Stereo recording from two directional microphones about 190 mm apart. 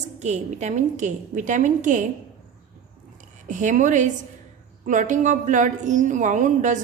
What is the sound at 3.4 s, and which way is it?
A woman's voice, 40° right (ahead or behind).